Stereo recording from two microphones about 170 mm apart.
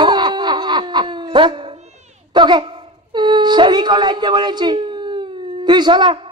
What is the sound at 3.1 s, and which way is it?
A woman's voice, 25° right (ahead or behind).